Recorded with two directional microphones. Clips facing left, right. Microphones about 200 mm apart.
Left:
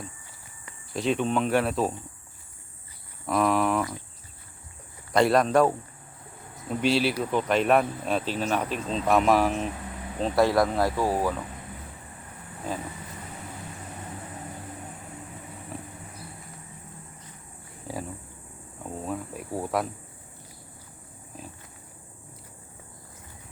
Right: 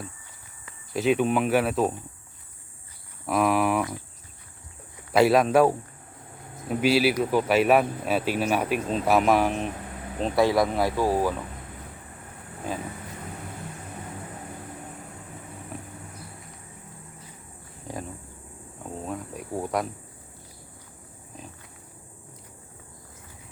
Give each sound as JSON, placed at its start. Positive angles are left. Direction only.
{"t": 0.9, "sound": "speech", "side_deg": -5}
{"t": 3.2, "sound": "speech", "side_deg": -5}
{"t": 5.1, "sound": "speech", "side_deg": -5}
{"t": 17.9, "sound": "a sound", "side_deg": 5}
{"t": 18.8, "sound": "cricket", "side_deg": 5}